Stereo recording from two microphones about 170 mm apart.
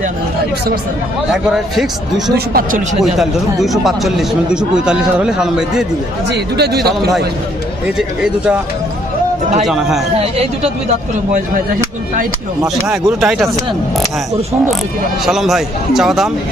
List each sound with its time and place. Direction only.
1.3 s speech: centre (ahead or behind)
2.3 s speech: 60° right (ahead or behind)
3.0 s speech: centre (ahead or behind)
6.2 s speech: 75° right (ahead or behind)
7.9 s speech: 5° right (ahead or behind)
12.6 s speech: centre (ahead or behind)
15.3 s speech: centre (ahead or behind)